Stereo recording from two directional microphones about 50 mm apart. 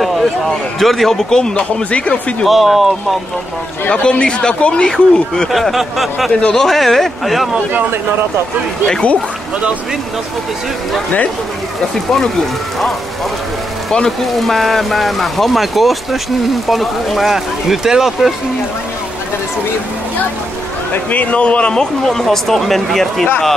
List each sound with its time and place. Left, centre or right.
0.7 s speech: centre; by 2.3 s left
2.4 s speech: centre
3.9 s speech: centre
5.5 s speech: centre
6.4 s speech: centre
8.8 s a man's voice: left
14.2 s speech: centre
21.1 s a man's voice: left
22.0 s speech: centre